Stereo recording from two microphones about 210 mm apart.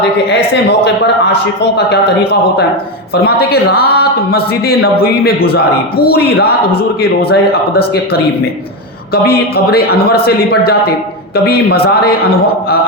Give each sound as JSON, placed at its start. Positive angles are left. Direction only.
{"t": 0.3, "sound": "speech", "side_deg": 55}
{"t": 3.2, "sound": "speech", "side_deg": 50}
{"t": 9.2, "sound": "speech", "side_deg": 50}